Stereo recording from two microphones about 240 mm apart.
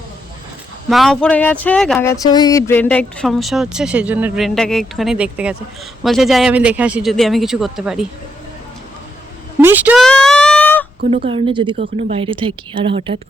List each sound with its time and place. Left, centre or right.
0.9 s speech: centre
9.6 s speech: centre
10.1 s a sound: centre
11.3 s a woman's voice: right